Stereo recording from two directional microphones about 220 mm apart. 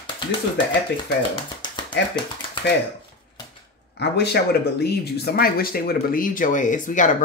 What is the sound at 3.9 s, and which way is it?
Speech, 50° left (ahead or behind).